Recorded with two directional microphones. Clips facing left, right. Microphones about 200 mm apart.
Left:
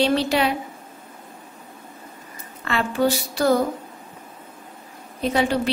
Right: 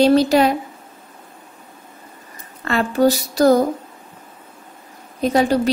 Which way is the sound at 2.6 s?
40° right (ahead or behind).